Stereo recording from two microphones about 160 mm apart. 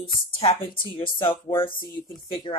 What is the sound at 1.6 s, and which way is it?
Speech, 30° left (ahead or behind).